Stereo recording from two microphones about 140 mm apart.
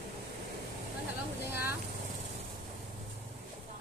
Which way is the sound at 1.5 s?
15° right (ahead or behind).